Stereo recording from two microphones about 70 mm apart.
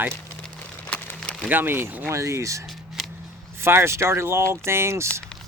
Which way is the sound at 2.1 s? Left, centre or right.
Right.